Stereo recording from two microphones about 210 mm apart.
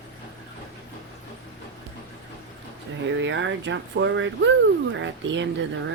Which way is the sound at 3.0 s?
60° right (ahead or behind).